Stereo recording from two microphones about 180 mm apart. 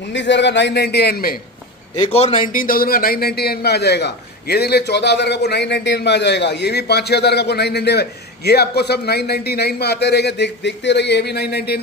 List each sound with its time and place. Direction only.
0.1 s a man's voice: 80° left; by 1.4 s 55° left (ahead or behind)
2.0 s a man's voice: 35° left (ahead or behind)
2.4 s a man's voice: 50° left (ahead or behind)